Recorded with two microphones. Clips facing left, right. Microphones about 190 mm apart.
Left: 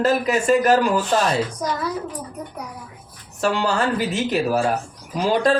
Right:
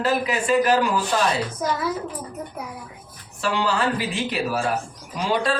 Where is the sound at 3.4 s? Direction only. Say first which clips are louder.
Left 3 dB; 45° left (ahead or behind).